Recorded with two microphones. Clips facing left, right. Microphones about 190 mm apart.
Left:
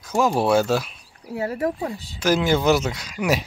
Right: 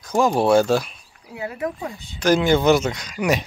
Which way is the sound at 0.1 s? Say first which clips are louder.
Right 2 dB; 5° left (ahead or behind).